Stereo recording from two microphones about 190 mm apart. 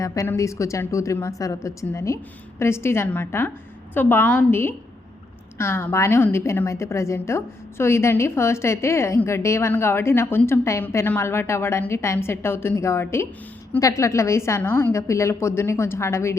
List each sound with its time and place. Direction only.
0.0 s a woman's voice: 15° left (ahead or behind)